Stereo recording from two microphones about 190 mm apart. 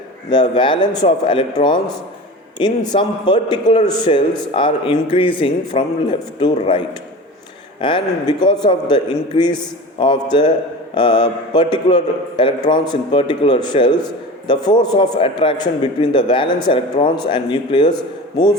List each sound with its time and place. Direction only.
0.3 s a man's voice: 25° left (ahead or behind)